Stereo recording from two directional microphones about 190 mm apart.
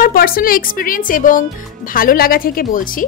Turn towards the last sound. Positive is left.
turn(degrees=45)  # may be behind; listen again after turning